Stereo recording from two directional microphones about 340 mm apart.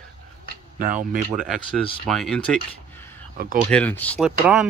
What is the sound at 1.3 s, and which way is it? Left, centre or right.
Speech, centre.